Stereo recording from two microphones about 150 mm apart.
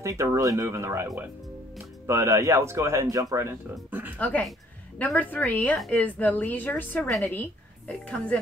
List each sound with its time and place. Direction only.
0.0 s a man's voice: 20° right (ahead or behind)
4.2 s a woman's voice: 10° left (ahead or behind)